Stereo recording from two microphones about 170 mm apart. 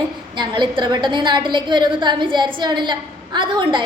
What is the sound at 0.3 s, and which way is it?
A woman's voice, 25° right (ahead or behind).